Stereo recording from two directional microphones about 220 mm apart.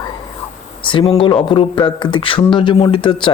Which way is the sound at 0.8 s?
25° left (ahead or behind).